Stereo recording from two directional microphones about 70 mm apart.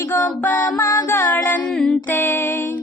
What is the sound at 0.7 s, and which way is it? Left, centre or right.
Music, left.